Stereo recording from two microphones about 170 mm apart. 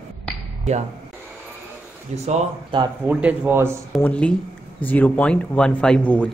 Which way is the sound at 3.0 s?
10° right (ahead or behind).